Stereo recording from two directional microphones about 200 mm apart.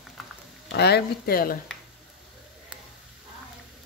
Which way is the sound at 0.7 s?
55° left (ahead or behind).